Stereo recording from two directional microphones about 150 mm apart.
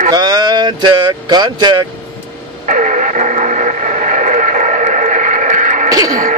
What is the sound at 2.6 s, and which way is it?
Radio, 60° right (ahead or behind).